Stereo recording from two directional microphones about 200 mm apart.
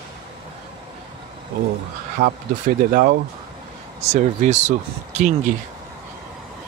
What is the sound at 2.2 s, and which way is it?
Speech, 40° right (ahead or behind).